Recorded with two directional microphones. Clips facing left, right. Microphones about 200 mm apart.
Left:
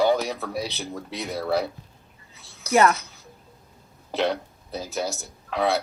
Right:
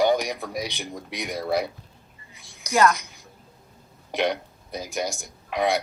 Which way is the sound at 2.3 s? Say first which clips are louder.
Left 4 dB; 15° right (ahead or behind).